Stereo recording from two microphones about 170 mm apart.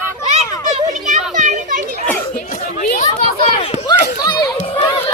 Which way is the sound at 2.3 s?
55° left (ahead or behind).